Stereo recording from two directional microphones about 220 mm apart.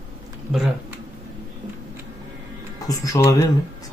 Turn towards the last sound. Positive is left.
turn(degrees=15)  # may be behind; listen again after turning